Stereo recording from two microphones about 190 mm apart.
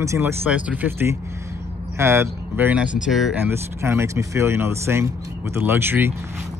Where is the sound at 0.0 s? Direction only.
15° right (ahead or behind).